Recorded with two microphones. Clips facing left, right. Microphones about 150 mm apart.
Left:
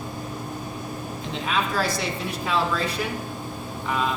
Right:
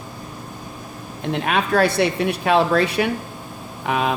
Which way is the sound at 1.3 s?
65° right (ahead or behind).